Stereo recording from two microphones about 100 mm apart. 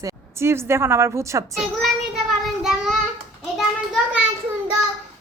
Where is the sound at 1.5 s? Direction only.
Centre (ahead or behind).